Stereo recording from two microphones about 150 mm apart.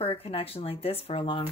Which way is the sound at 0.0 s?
35° left (ahead or behind).